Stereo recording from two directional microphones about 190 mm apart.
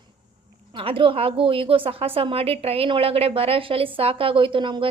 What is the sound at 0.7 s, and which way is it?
A woman's voice, 30° right (ahead or behind).